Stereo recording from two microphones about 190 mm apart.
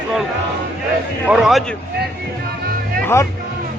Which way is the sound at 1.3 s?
Centre (ahead or behind).